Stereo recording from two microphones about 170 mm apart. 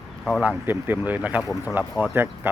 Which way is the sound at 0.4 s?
10° right (ahead or behind).